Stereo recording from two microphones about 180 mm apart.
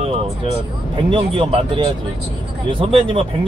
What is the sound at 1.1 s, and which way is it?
Speech, 30° right (ahead or behind).